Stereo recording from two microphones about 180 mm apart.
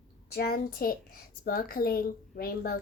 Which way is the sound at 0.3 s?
60° left (ahead or behind).